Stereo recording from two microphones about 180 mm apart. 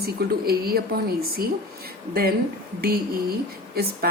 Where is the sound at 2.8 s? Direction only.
55° right (ahead or behind).